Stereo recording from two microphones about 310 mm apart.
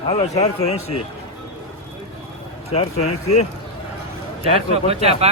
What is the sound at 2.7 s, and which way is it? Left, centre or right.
Speech, left.